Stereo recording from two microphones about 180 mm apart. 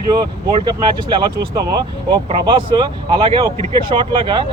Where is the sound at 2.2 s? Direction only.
30° right (ahead or behind).